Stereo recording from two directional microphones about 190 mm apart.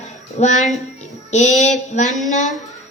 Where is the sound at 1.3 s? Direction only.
40° left (ahead or behind).